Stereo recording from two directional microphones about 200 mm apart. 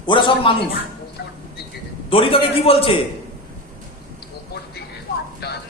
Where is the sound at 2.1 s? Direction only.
30° left (ahead or behind).